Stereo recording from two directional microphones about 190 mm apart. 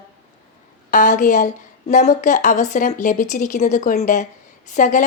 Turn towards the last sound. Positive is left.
turn(degrees=40)  # may be behind; listen again after turning